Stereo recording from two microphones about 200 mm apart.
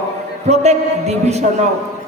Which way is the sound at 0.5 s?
35° right (ahead or behind).